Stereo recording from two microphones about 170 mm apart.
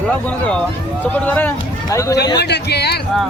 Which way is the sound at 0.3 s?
5° left (ahead or behind).